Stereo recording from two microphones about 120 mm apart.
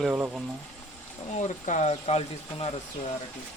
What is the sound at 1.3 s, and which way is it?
Speech, 80° left.